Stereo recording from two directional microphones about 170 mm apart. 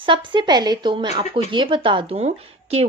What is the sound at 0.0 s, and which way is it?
Speech, 30° right (ahead or behind).